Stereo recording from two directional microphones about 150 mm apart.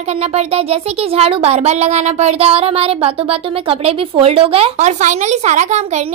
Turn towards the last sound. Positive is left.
turn(degrees=-50)  # may be behind; listen again after turning